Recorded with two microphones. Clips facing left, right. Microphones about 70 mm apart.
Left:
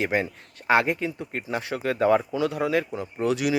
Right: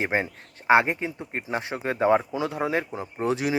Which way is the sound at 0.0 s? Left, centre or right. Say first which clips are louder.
Left 1 dB; right.